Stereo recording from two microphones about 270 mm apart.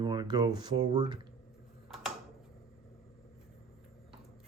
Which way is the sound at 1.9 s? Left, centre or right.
Centre.